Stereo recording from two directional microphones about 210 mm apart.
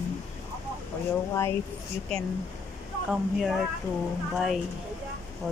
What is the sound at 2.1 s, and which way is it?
Speech, 5° left (ahead or behind).